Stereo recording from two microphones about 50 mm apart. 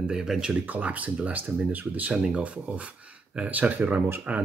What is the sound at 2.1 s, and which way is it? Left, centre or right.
Speech, right.